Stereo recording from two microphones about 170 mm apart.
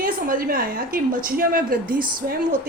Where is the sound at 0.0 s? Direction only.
55° right (ahead or behind).